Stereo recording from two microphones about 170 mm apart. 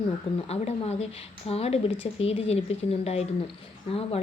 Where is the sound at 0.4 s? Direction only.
40° left (ahead or behind).